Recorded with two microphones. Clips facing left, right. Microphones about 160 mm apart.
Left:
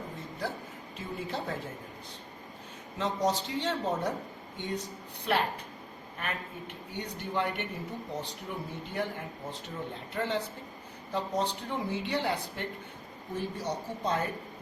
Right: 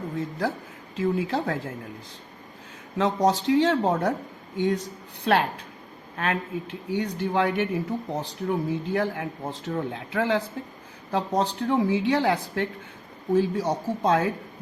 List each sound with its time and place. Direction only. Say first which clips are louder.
0.2 s speech: right 10 dB; 90° right
3.0 s speech: right 7 dB; 90° right